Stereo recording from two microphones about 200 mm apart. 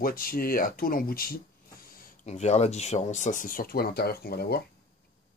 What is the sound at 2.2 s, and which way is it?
Speech, 35° left (ahead or behind).